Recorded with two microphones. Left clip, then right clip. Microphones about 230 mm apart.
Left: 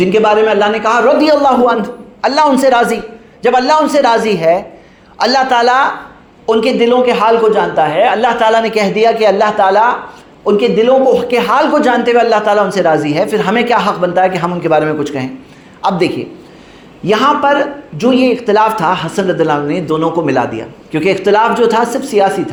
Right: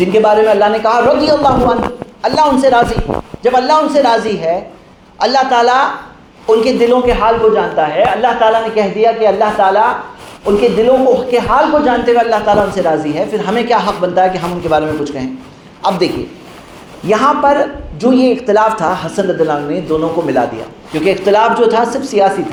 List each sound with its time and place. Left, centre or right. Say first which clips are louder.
0.0 s a man's voice: even; left